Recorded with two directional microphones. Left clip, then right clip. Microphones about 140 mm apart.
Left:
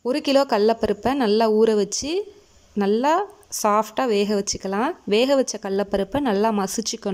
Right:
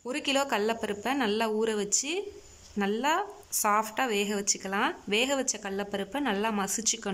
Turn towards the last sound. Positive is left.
turn(degrees=35)  # may be behind; listen again after turning